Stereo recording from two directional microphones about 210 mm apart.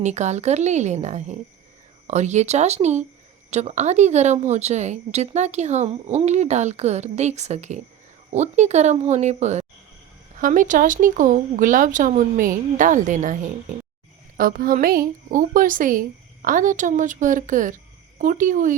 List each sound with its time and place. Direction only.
0.0 s speech: 35° right (ahead or behind)